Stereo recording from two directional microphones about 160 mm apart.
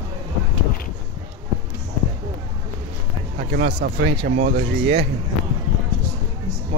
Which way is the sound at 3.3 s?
80° right.